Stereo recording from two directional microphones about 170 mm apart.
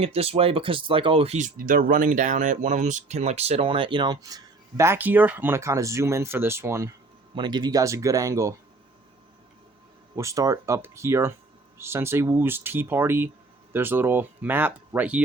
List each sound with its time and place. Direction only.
0.0 s speech: 35° right (ahead or behind)
1.4 s speech: 50° right (ahead or behind); by 8.5 s 20° right (ahead or behind)
10.2 s speech: 20° right (ahead or behind)